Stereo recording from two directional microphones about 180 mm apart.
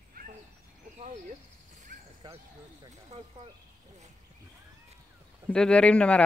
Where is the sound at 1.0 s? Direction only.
40° right (ahead or behind).